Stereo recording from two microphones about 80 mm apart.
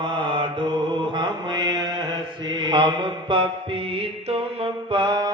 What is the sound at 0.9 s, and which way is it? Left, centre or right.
Mantra, right.